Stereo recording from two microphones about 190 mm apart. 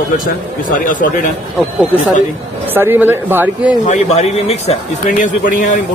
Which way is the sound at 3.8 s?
35° left (ahead or behind).